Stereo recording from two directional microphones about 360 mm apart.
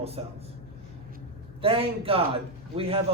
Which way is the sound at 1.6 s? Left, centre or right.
Centre.